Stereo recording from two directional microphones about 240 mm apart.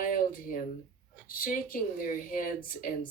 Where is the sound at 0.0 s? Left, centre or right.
Left.